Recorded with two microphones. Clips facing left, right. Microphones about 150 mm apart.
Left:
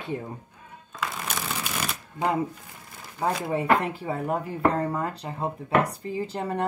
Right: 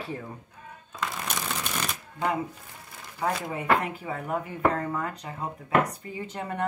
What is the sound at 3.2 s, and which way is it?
Speech, 30° left (ahead or behind).